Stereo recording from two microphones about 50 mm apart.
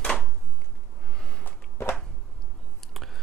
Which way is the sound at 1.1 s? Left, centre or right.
Centre.